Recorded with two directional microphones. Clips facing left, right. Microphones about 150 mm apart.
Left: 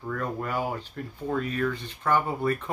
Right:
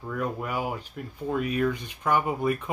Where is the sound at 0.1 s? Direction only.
10° right (ahead or behind).